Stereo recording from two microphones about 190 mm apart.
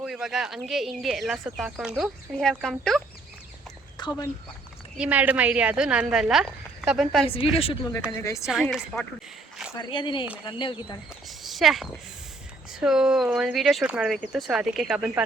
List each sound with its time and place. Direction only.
0.0 s speech: centre (ahead or behind)
4.0 s a sound: 25° left (ahead or behind)
4.9 s speech: 10° right (ahead or behind)
7.3 s a woman's voice: 30° left (ahead or behind)
8.2 s a woman's voice: 15° left (ahead or behind)
8.6 s speech: centre (ahead or behind)
9.7 s speech: 25° left (ahead or behind)
11.3 s speech: centre (ahead or behind)